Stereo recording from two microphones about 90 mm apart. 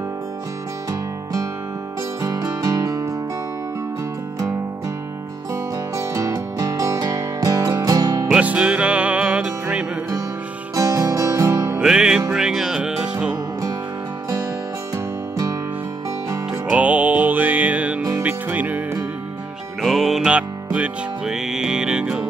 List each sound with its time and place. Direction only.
2.2 s music: 40° right (ahead or behind)
5.5 s music: 35° right (ahead or behind)
8.4 s music: 15° right (ahead or behind)
10.7 s music: 40° right (ahead or behind)
11.8 s music: 5° right (ahead or behind)
16.7 s music: 15° right (ahead or behind)
19.8 s music: centre (ahead or behind)